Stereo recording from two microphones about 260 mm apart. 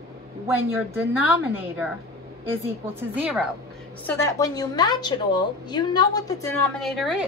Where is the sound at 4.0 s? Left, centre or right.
Centre.